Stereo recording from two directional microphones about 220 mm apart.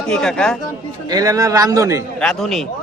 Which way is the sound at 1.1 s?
15° right (ahead or behind).